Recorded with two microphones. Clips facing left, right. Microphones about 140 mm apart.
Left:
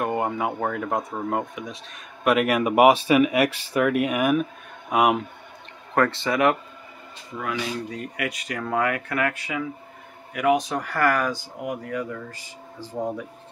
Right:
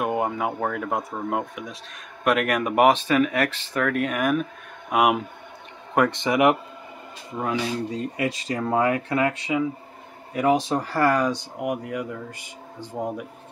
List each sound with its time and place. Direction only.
0.0 s speech: 5° right (ahead or behind)
5.9 s speech: 15° right (ahead or behind)